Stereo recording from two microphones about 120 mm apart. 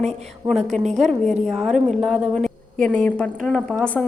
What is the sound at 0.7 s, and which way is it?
Speech, 75° right (ahead or behind).